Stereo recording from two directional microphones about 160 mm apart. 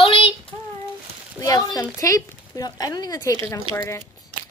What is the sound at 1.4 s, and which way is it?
Speech, 20° left (ahead or behind).